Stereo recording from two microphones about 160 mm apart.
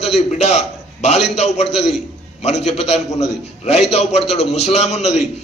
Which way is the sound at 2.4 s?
45° left (ahead or behind).